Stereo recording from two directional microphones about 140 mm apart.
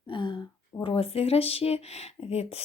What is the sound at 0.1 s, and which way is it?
A woman's voice, 35° left (ahead or behind).